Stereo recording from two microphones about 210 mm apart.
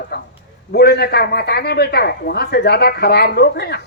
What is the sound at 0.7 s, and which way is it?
A man's voice, 50° left (ahead or behind).